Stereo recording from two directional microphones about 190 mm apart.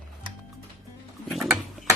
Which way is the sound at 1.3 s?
Centre (ahead or behind).